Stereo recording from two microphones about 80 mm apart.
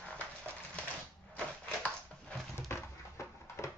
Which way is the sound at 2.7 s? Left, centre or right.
Left.